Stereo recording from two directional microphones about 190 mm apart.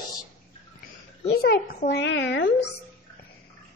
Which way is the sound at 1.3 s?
55° left (ahead or behind).